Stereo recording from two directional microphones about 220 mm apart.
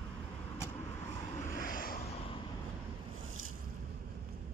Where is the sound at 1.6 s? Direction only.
40° left (ahead or behind).